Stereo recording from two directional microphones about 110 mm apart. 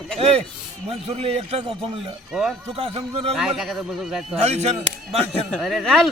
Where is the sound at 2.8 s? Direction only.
65° right (ahead or behind).